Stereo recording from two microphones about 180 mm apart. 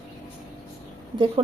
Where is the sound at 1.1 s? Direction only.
30° right (ahead or behind).